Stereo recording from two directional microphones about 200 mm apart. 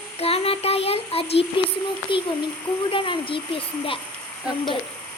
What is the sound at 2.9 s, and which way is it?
Speech, 25° left (ahead or behind).